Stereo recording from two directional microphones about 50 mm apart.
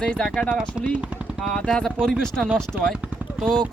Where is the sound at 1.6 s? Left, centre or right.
Centre.